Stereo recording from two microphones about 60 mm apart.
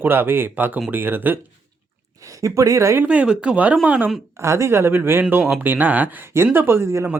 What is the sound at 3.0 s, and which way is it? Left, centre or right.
Speech, right.